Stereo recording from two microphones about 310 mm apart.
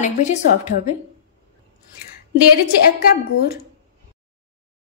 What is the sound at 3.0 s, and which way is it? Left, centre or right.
Speech, left.